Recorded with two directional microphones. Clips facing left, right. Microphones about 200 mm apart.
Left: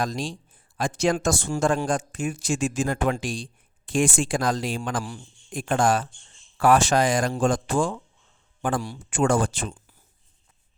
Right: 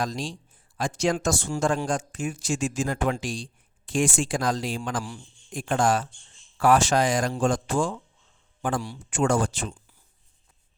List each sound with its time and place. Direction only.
0.0 s speech: 55° left (ahead or behind)